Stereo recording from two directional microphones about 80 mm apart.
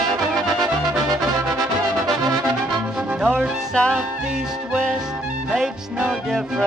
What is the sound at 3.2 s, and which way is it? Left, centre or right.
Music, centre.